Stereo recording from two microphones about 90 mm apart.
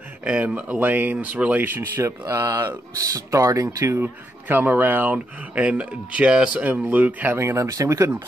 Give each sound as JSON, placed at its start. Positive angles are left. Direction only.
{"t": 0.2, "sound": "speech", "side_deg": -15}
{"t": 4.0, "sound": "speech", "side_deg": -20}
{"t": 7.3, "sound": "speech", "side_deg": -30}